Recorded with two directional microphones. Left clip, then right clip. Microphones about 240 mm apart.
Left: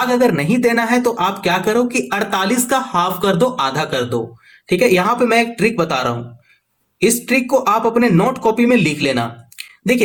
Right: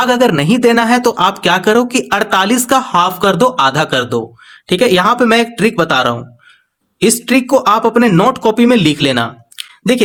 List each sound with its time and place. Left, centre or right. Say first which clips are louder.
0.2 s speech: right 4 dB; right